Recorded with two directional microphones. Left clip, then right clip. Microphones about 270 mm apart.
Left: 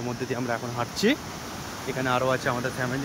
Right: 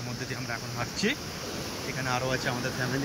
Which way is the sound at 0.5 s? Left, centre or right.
Left.